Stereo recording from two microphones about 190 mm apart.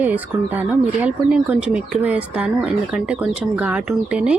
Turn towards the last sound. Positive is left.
turn(degrees=-5)  # may be behind; listen again after turning